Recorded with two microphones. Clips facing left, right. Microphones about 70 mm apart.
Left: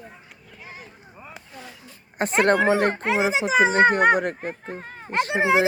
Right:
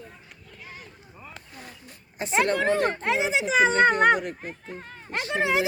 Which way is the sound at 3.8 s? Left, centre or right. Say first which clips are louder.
Left 2 dB; left.